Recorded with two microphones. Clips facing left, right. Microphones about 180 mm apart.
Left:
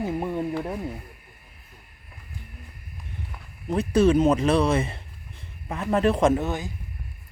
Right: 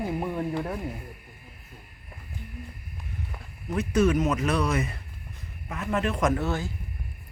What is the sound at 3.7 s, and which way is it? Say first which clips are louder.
Speech: left 4 dB; 30° left (ahead or behind).